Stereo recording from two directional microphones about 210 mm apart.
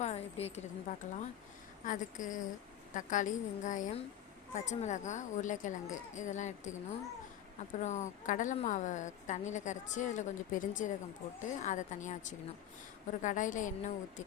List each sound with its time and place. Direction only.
0.0 s a woman's voice: 30° left (ahead or behind)
7.8 s a woman's voice: 35° left (ahead or behind)